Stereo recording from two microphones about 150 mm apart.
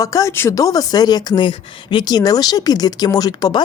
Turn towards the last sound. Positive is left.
turn(degrees=30)  # may be behind; listen again after turning